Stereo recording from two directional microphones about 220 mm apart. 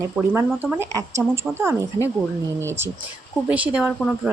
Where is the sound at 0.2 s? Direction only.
5° right (ahead or behind).